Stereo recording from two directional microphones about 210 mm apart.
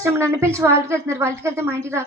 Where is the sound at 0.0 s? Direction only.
15° right (ahead or behind).